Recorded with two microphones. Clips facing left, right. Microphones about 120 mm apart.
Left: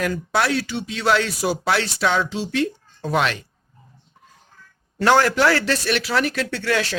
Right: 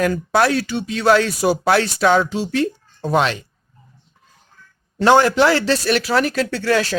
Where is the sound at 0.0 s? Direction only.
45° right (ahead or behind).